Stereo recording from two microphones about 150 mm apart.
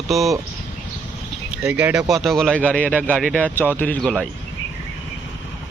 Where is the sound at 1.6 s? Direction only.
10° right (ahead or behind).